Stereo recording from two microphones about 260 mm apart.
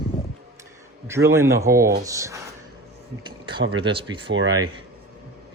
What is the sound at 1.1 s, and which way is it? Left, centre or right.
Speech, centre.